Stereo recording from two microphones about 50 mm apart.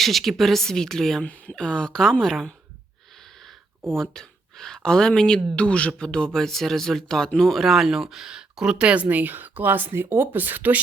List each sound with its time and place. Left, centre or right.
0.0 s a woman's voice: centre
1.2 s speech: left; by 2.6 s centre
3.2 s a sound: centre
3.9 s speech: centre; by 9.0 s right
9.0 s speech: right